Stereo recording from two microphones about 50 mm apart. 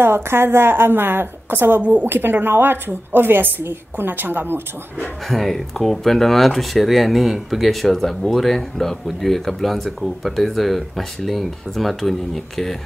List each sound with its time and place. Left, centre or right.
0.0 s a woman's voice: right
1.8 s a woman's voice: right
2.0 s a woman's voice: right
5.3 s speech: centre